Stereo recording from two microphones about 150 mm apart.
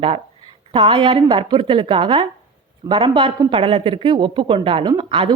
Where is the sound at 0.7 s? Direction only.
35° right (ahead or behind).